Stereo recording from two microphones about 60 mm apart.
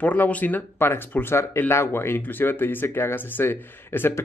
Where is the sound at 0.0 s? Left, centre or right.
Left.